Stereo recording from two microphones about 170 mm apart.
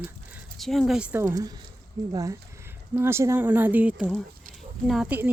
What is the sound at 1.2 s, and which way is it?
Speech, 20° right (ahead or behind).